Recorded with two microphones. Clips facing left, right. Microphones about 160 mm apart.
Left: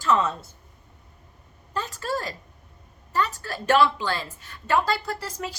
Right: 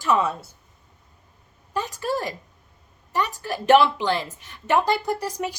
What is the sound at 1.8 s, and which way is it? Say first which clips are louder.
A woman's voice: right 3 dB; 15° right (ahead or behind).